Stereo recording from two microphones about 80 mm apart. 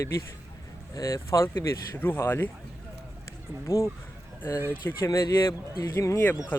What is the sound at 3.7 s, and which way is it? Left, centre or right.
Speech, left.